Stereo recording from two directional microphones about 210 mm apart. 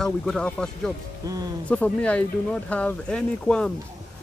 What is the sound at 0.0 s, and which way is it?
Speech, 5° left (ahead or behind).